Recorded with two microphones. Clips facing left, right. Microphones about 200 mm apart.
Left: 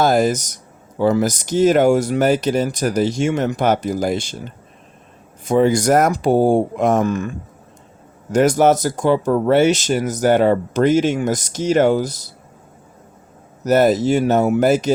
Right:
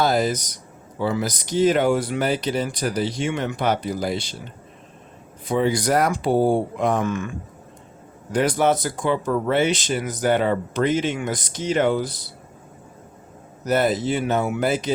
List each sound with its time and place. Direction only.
0.0 s speech: 50° left (ahead or behind)
5.5 s speech: 45° left (ahead or behind)
13.7 s speech: 45° left (ahead or behind)